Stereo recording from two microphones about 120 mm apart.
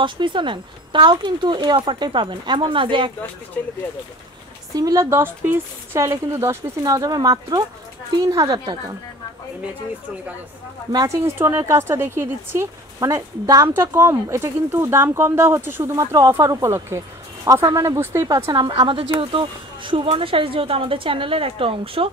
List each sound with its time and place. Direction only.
0.0 s speech: 40° right (ahead or behind)
4.7 s speech: 30° right (ahead or behind)
10.9 s speech: 30° right (ahead or behind)
11.2 s speech: 20° right (ahead or behind)
18.5 s speech: 40° right (ahead or behind)